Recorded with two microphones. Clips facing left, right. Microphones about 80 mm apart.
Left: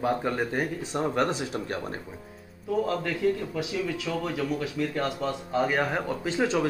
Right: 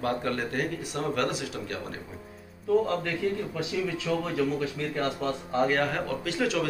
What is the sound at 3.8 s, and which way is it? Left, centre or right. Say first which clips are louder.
Speech: right 1 dB; centre.